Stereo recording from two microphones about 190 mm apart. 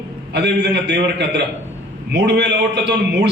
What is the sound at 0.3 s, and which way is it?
A man's voice, 65° right (ahead or behind).